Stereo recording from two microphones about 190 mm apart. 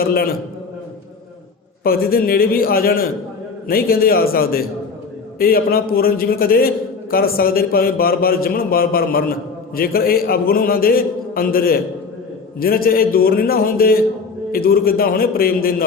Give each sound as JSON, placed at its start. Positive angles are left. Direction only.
{"t": 0.0, "sound": "a man's voice", "side_deg": 50}
{"t": 1.8, "sound": "a man's voice", "side_deg": 50}